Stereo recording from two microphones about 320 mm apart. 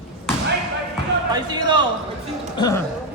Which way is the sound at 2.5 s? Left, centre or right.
Centre.